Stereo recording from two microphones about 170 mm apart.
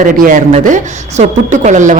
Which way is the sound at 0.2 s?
50° right (ahead or behind).